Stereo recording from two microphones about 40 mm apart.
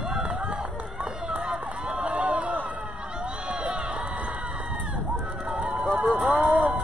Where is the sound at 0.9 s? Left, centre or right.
Centre.